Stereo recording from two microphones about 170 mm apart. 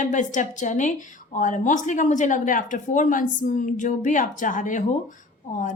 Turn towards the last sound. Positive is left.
turn(degrees=50)  # may be behind; listen again after turning